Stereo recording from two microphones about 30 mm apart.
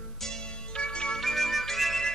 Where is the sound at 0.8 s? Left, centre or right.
Left.